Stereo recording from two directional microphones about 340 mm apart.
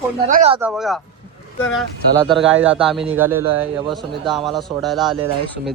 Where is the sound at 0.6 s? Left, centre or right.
Centre.